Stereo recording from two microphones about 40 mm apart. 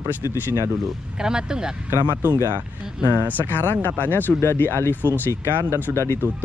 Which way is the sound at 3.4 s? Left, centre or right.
Left.